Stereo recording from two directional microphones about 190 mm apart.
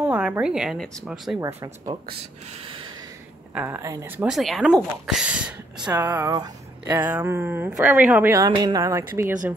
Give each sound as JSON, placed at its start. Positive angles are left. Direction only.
{"t": 0.0, "sound": "a woman's voice", "side_deg": -10}
{"t": 1.4, "sound": "a woman's voice", "side_deg": -15}
{"t": 3.5, "sound": "a woman's voice", "side_deg": -10}
{"t": 4.3, "sound": "a woman's voice", "side_deg": 0}